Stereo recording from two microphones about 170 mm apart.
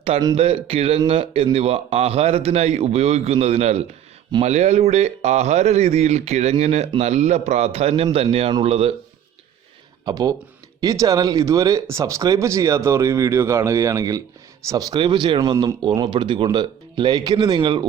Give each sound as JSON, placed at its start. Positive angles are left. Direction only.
{"t": 0.3, "sound": "speech", "side_deg": -35}
{"t": 10.1, "sound": "speech", "side_deg": -20}